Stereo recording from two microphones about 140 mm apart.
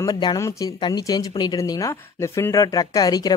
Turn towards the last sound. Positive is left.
turn(degrees=30)  # may be behind; listen again after turning